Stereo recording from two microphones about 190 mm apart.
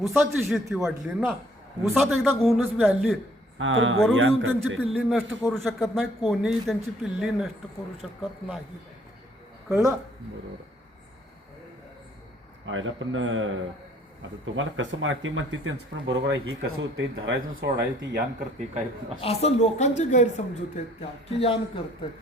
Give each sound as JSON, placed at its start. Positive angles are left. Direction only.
{"t": 0.0, "sound": "a man's voice", "side_deg": 0}
{"t": 3.6, "sound": "speech", "side_deg": -90}
{"t": 4.9, "sound": "a man's voice", "side_deg": 0}
{"t": 9.6, "sound": "speech", "side_deg": -5}
{"t": 12.6, "sound": "speech", "side_deg": -90}
{"t": 19.2, "sound": "speech", "side_deg": 30}